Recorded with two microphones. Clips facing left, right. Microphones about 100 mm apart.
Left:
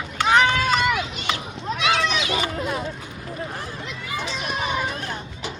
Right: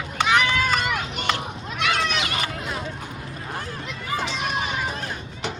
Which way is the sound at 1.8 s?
60° right (ahead or behind).